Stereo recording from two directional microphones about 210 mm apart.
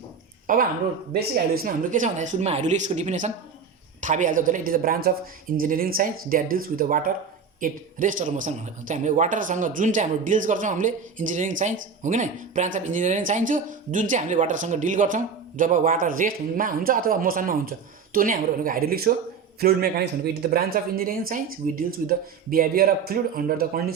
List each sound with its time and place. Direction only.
0.4 s a man's voice: 40° right (ahead or behind)